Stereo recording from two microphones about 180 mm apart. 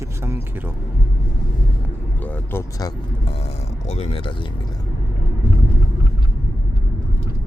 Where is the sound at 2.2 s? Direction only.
10° left (ahead or behind).